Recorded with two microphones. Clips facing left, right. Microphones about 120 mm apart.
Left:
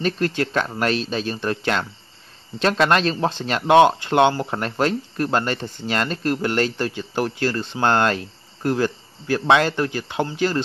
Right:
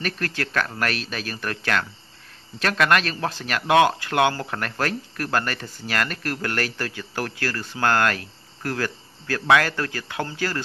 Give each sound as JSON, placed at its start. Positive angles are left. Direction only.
{"t": 0.0, "sound": "speech", "side_deg": 25}